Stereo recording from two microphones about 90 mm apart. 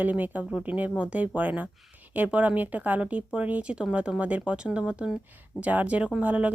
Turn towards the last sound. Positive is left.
turn(degrees=-15)  # may be behind; listen again after turning